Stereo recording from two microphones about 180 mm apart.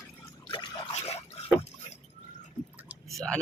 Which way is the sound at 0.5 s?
30° left (ahead or behind).